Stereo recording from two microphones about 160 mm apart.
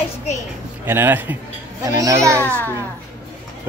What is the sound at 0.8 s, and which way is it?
A child's voice, 15° right (ahead or behind).